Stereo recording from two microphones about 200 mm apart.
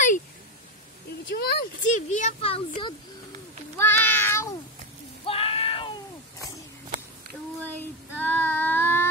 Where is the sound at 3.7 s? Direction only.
10° left (ahead or behind).